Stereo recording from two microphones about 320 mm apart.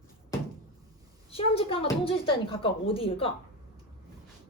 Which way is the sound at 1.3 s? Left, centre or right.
Centre.